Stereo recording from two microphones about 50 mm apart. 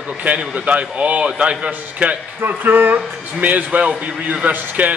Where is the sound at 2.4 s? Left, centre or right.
Right.